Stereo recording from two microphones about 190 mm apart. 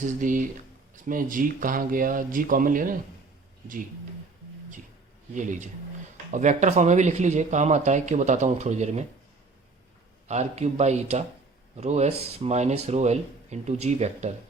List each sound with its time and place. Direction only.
0.2 s speech: 45° right (ahead or behind)
5.3 s speech: 40° right (ahead or behind)
10.2 s speech: 35° right (ahead or behind)